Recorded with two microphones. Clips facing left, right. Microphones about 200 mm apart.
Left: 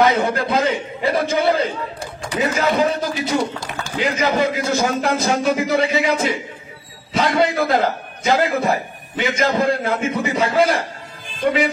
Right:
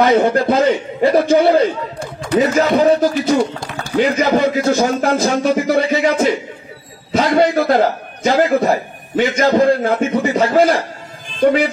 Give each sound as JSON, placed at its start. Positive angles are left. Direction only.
{"t": 0.0, "sound": "a man's voice", "side_deg": -55}